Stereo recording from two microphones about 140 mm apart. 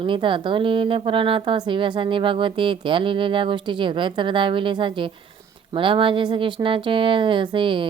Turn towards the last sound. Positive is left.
turn(degrees=-35)  # may be behind; listen again after turning